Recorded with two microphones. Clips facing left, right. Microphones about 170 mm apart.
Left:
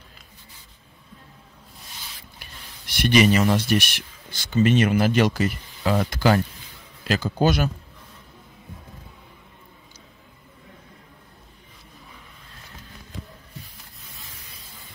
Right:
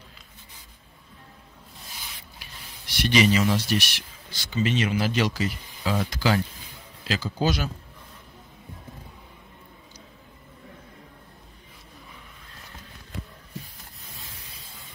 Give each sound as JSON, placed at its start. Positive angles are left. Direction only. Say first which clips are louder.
{"t": 3.0, "sound": "a man's voice", "louder": "left 3 dB", "side_deg": 55}